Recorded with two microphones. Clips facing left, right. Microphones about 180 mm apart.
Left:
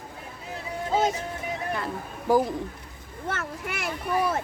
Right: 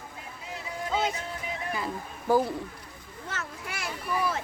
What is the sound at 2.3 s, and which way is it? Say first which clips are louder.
Speech: left 2 dB; 15° left (ahead or behind).